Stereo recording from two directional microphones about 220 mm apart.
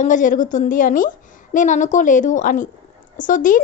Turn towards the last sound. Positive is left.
turn(degrees=35)  # may be behind; listen again after turning